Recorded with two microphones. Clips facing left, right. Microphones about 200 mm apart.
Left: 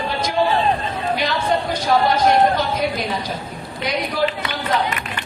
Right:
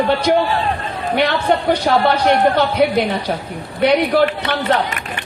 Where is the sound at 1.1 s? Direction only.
65° right (ahead or behind).